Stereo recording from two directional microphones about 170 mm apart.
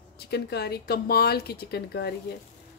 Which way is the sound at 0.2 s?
70° left (ahead or behind).